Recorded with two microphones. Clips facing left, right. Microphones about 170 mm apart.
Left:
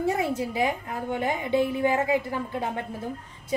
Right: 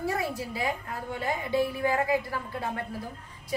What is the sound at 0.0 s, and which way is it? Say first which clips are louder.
A woman's voice: left 5 dB; 20° left (ahead or behind).